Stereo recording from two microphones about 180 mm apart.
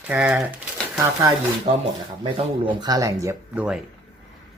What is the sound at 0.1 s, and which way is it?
Speech, 5° right (ahead or behind).